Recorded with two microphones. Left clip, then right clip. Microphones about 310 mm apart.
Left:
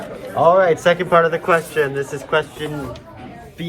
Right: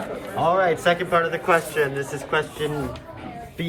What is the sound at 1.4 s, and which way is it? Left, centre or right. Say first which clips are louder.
A man's voice: left 3 dB; centre.